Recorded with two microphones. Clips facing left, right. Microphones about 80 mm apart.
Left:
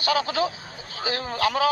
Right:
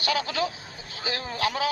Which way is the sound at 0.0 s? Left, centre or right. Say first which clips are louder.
Left 3 dB; left.